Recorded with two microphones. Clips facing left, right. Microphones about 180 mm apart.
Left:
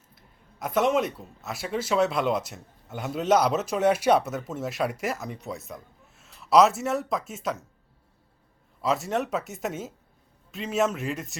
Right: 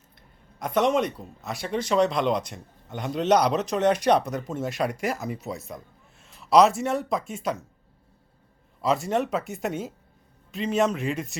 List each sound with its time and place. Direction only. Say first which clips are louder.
0.2 s speech: right 1 dB; 5° left (ahead or behind)
8.8 s speech: right 2 dB; centre (ahead or behind)